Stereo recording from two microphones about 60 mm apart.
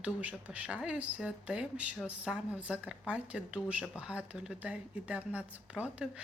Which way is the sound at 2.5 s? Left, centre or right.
Right.